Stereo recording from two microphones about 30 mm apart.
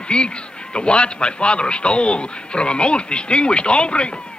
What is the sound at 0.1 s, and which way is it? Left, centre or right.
A man's voice, left.